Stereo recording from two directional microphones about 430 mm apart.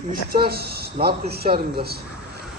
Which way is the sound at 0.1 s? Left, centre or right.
Right.